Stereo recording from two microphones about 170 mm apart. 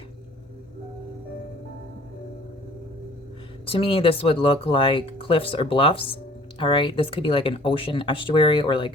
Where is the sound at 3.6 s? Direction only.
35° left (ahead or behind).